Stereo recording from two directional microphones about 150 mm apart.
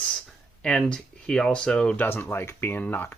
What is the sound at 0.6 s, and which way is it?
Speech, 5° left (ahead or behind).